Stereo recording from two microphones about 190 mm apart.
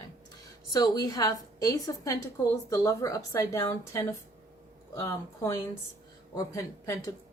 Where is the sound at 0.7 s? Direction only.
20° left (ahead or behind).